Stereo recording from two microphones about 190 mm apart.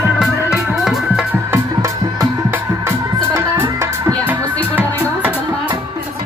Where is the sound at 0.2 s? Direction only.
Centre (ahead or behind).